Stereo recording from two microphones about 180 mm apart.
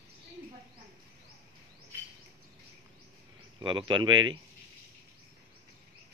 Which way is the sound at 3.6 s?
25° right (ahead or behind).